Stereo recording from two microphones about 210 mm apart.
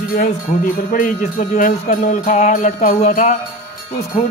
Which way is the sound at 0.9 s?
40° left (ahead or behind).